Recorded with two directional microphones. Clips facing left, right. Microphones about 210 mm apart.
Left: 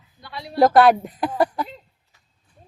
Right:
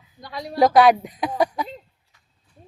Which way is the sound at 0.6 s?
Centre (ahead or behind).